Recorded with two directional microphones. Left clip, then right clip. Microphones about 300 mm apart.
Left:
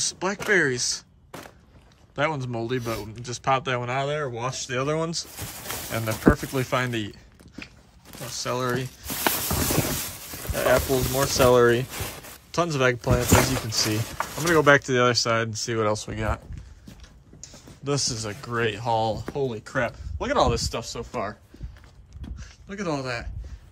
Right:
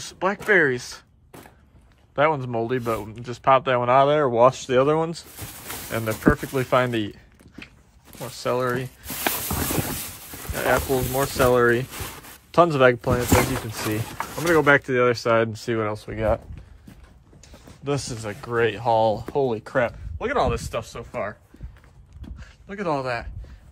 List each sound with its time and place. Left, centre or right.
0.0 s speech: centre
2.1 s speech: centre
17.8 s speech: centre
22.2 s a sound: centre